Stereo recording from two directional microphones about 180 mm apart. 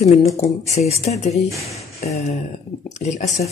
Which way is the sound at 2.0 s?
45° left (ahead or behind).